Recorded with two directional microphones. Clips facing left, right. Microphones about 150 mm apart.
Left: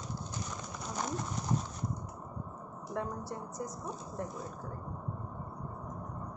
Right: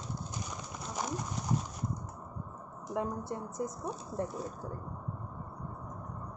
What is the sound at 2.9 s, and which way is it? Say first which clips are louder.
Speech: right 3 dB; 25° right (ahead or behind).